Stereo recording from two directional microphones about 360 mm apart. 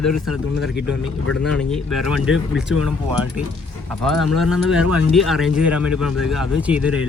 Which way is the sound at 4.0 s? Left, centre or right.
Centre.